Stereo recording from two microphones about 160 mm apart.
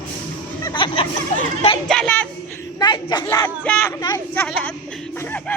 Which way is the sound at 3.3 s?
15° left (ahead or behind).